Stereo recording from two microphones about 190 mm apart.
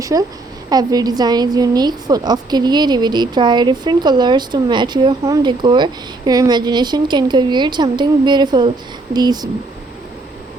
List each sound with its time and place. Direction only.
0.0 s a woman's voice: 20° right (ahead or behind)